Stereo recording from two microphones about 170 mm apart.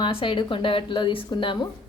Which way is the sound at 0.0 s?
30° left (ahead or behind).